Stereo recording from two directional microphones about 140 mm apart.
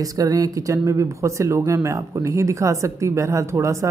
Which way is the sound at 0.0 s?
25° right (ahead or behind).